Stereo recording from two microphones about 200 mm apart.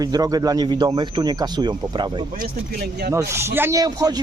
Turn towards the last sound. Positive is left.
turn(degrees=-20)  # may be behind; listen again after turning